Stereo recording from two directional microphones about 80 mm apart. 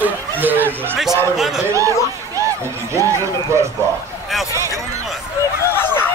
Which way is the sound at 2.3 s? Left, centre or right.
Right.